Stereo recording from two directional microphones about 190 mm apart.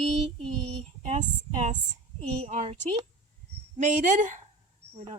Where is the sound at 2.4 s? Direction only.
35° right (ahead or behind).